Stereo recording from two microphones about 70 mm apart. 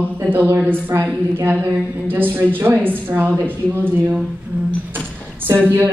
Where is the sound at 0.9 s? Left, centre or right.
Right.